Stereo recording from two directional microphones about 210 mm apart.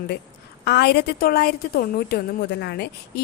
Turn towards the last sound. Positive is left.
turn(degrees=50)  # may be behind; listen again after turning